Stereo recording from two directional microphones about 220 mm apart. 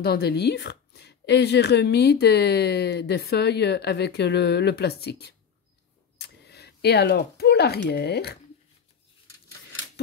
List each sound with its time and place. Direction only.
0.0 s speech: 45° left (ahead or behind)